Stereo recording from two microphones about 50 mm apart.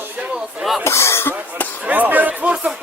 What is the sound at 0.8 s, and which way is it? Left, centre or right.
Speech, left.